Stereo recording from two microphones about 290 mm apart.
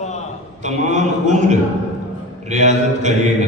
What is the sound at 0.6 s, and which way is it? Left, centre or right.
A man's voice, right.